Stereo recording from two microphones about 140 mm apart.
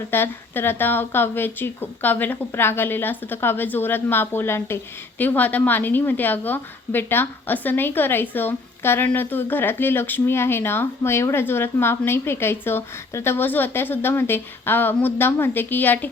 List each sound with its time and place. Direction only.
0.1 s speech: 15° left (ahead or behind)